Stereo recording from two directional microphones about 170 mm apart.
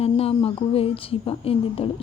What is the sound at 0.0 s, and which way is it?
A woman's voice, 35° left (ahead or behind).